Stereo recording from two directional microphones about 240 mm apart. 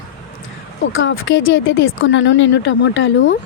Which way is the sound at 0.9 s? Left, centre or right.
Left.